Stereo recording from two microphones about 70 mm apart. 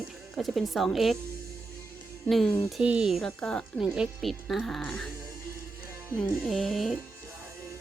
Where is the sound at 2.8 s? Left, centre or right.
Centre.